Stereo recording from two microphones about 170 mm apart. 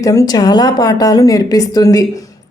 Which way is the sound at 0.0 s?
20° left (ahead or behind).